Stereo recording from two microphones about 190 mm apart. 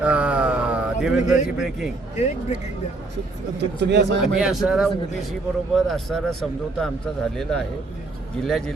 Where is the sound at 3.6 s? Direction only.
65° right (ahead or behind).